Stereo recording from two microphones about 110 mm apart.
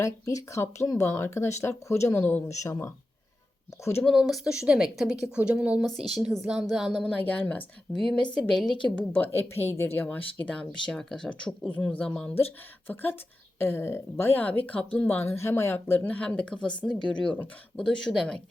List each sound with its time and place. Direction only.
0.0 s speech: 30° left (ahead or behind)
4.0 s a woman's voice: centre (ahead or behind)
7.2 s a woman's voice: 15° left (ahead or behind)
9.0 s speech: 15° left (ahead or behind)